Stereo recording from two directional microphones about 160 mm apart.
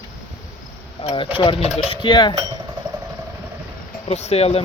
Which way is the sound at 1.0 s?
30° left (ahead or behind).